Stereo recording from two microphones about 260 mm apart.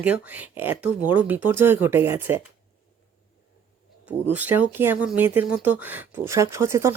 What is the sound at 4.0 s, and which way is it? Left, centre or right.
Speech, centre.